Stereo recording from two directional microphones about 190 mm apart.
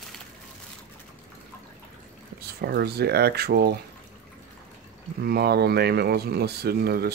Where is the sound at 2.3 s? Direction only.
55° right (ahead or behind).